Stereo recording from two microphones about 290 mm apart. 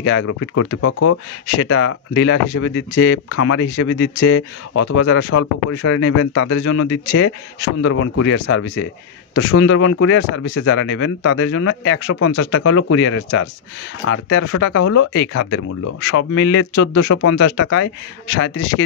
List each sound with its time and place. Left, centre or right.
0.0 s a man's voice: left
2.7 s speech: left
4.8 s a man's voice: left
6.9 s speech: left
7.8 s a man's voice: left
15.3 s speech: left
16.1 s a man's voice: left